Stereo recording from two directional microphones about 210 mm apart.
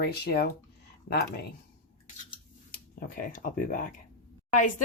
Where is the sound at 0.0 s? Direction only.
50° left (ahead or behind).